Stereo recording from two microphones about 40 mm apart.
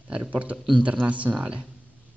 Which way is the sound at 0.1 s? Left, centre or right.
Right.